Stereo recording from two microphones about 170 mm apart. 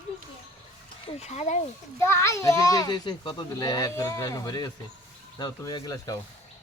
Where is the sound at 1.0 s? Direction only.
40° left (ahead or behind).